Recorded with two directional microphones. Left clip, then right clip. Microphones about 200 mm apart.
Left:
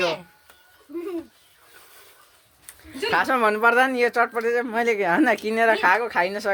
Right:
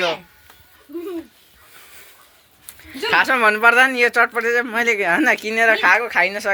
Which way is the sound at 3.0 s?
10° left (ahead or behind).